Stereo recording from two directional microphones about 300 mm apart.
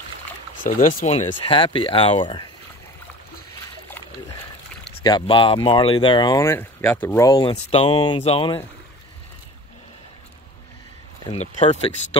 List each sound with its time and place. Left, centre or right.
0.7 s speech: left
5.0 s speech: centre
11.2 s speech: centre